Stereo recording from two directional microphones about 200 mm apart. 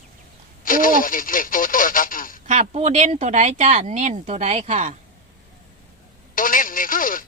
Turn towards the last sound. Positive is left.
turn(degrees=45)  # may be behind; listen again after turning